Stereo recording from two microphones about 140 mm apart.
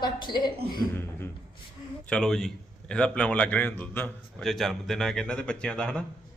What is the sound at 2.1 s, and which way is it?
A man's voice, 5° left (ahead or behind).